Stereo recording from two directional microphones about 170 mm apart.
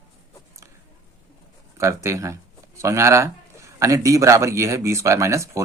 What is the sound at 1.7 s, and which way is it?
A man's voice, 15° right (ahead or behind).